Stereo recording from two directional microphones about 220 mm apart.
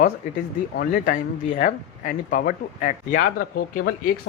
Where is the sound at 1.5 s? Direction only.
40° left (ahead or behind).